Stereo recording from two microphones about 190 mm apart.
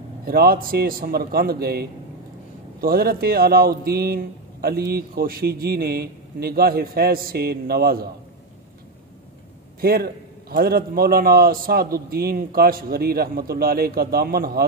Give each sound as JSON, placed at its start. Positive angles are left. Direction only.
{"t": 0.2, "sound": "speech", "side_deg": -50}
{"t": 9.8, "sound": "speech", "side_deg": -55}